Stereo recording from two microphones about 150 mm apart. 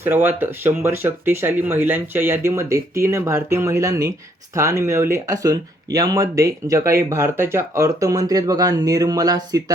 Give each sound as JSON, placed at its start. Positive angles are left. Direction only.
{"t": 0.0, "sound": "speech", "side_deg": -15}